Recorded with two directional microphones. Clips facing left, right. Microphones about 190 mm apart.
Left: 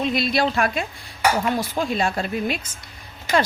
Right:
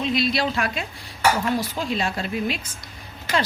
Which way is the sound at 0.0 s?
50° left (ahead or behind).